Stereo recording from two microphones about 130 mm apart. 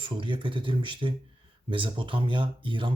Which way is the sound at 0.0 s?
40° right (ahead or behind).